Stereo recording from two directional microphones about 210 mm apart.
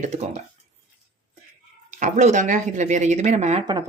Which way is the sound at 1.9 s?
35° right (ahead or behind).